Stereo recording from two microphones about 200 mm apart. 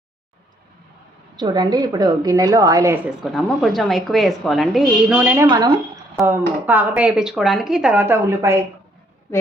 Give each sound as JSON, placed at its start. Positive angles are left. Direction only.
{"t": 1.4, "sound": "a woman's voice", "side_deg": -20}
{"t": 3.3, "sound": "a woman's voice", "side_deg": 0}
{"t": 5.5, "sound": "a woman's voice", "side_deg": -20}